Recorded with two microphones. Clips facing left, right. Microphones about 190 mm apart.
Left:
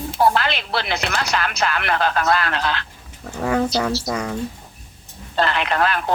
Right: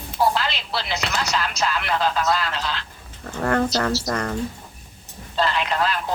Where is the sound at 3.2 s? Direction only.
5° left (ahead or behind).